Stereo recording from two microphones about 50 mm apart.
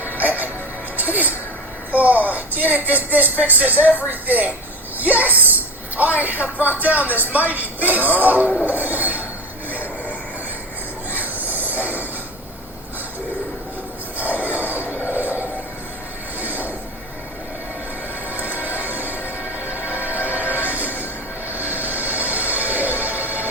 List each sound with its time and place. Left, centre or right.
0.0 s music: right
1.9 s speech: right
8.6 s train wheels squealing: right
9.6 s a sound: right
11.1 s train: right
14.2 s a sound: right
16.4 s music: right
18.3 s music: right